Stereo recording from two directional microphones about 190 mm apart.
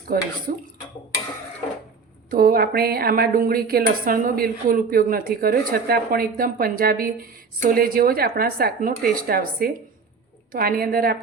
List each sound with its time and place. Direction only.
0.1 s a woman's voice: 50° right (ahead or behind)
2.3 s a woman's voice: 50° right (ahead or behind)